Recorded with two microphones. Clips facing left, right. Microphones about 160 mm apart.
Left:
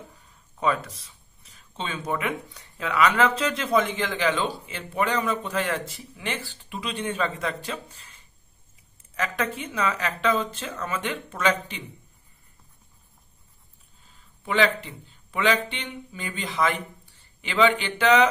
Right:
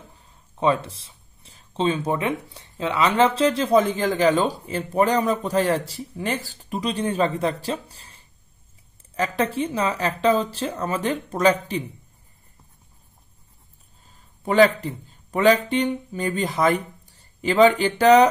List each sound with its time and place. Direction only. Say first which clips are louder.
0.6 s speech: right 4 dB; 30° right (ahead or behind)
14.0 s speech: right 6 dB; 40° right (ahead or behind)